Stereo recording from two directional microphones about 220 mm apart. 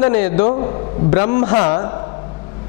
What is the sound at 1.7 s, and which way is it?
Speech, 20° left (ahead or behind).